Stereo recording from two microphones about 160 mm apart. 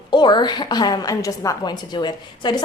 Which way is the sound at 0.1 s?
30° left (ahead or behind).